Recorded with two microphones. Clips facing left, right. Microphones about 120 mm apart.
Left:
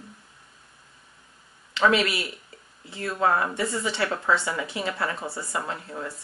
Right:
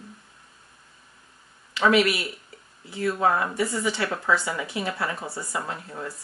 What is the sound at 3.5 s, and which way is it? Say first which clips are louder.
Speech: right 1 dB; 25° left (ahead or behind).